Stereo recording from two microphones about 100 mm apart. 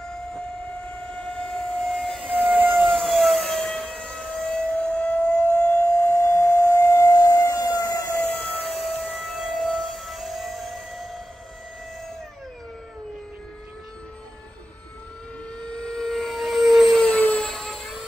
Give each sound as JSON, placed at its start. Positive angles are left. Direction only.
{"t": 0.0, "sound": "train", "side_deg": 5}
{"t": 2.4, "sound": "civil defense siren", "side_deg": -20}
{"t": 2.9, "sound": "civil defense siren", "side_deg": 0}
{"t": 5.9, "sound": "civil defense siren", "side_deg": 30}
{"t": 8.2, "sound": "civil defense siren", "side_deg": 10}
{"t": 8.6, "sound": "civil defense siren", "side_deg": 0}
{"t": 15.6, "sound": "a sound", "side_deg": 10}
{"t": 17.2, "sound": "helicopter", "side_deg": 15}
{"t": 17.5, "sound": "helicopter", "side_deg": 0}